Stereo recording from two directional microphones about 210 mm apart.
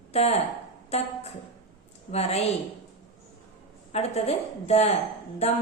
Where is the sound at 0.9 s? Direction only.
30° left (ahead or behind).